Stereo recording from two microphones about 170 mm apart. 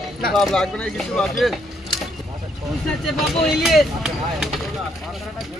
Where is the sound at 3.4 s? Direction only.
Centre (ahead or behind).